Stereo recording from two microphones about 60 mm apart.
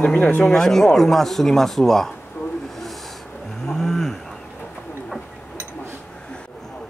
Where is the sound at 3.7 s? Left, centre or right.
Centre.